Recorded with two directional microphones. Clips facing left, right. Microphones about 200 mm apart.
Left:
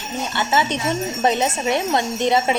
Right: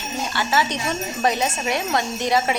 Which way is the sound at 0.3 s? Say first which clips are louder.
Left 2 dB; 20° left (ahead or behind).